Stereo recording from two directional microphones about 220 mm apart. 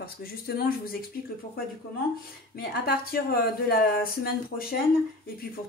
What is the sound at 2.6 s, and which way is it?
Speech, 45° left (ahead or behind).